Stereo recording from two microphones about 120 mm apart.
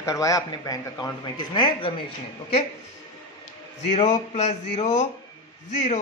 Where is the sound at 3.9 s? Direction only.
65° left (ahead or behind).